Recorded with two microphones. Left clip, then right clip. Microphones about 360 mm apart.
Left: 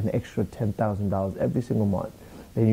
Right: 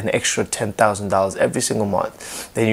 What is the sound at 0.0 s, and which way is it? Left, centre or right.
Speech, centre.